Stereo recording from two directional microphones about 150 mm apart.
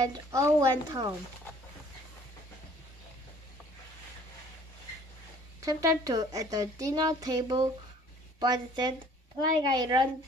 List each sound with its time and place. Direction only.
0.0 s a woman's voice: 20° right (ahead or behind)
5.6 s a woman's voice: 20° right (ahead or behind)